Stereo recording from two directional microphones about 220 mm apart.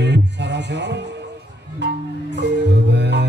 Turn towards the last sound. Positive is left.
turn(degrees=-50)  # may be behind; listen again after turning